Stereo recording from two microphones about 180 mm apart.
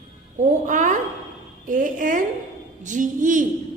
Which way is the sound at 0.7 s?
45° right (ahead or behind).